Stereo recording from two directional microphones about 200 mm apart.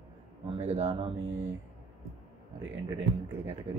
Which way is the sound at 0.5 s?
30° right (ahead or behind).